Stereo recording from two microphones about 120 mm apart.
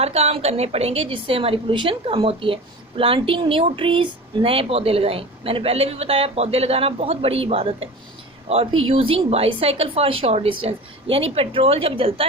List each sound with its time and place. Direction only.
0.0 s a woman's voice: 60° right (ahead or behind)